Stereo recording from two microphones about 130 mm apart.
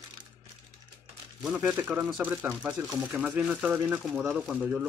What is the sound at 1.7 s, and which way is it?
Speech, 10° right (ahead or behind).